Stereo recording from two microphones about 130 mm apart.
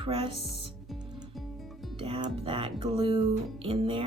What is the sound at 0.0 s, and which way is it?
Speech, 50° right (ahead or behind).